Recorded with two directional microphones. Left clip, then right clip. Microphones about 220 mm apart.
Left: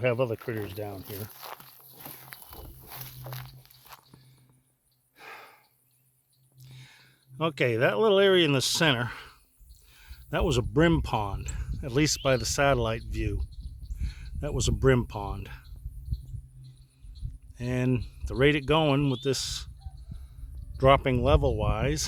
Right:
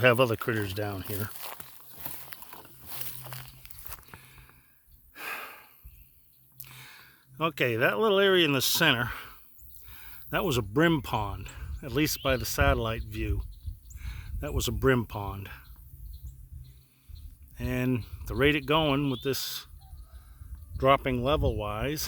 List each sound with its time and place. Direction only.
0.0 s speech: 55° right (ahead or behind)
1.4 s walk: 5° right (ahead or behind)
3.8 s a sound: 20° right (ahead or behind)
5.1 s gasp: 40° right (ahead or behind)
6.6 s speech: 25° right (ahead or behind); by 15.7 s 10° right (ahead or behind)
17.6 s speech: 10° right (ahead or behind)
20.7 s speech: centre (ahead or behind)